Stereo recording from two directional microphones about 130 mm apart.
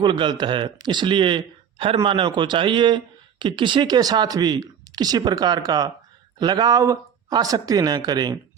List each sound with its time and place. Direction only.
0.0 s speech: 35° right (ahead or behind)